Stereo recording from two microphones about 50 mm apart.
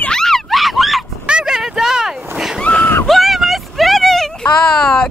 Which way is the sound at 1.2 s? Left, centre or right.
Centre.